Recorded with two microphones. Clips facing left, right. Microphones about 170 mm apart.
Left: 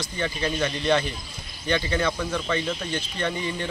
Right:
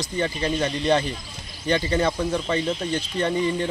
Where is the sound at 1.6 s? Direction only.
40° right (ahead or behind).